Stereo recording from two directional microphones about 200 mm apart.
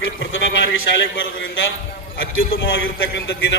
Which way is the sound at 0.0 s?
75° left (ahead or behind).